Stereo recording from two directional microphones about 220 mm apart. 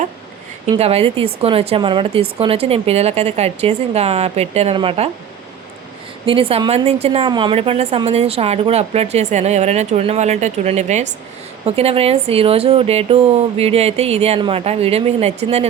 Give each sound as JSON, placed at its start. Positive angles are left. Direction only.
{"t": 0.8, "sound": "speech", "side_deg": -25}
{"t": 6.2, "sound": "a woman's voice", "side_deg": -25}